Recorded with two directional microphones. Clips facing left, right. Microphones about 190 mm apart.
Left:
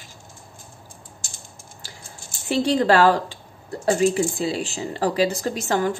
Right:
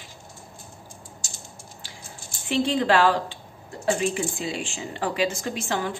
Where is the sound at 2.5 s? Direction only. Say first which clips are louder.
Left 3 dB; 40° left (ahead or behind).